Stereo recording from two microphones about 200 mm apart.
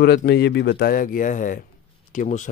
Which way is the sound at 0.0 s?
50° left (ahead or behind).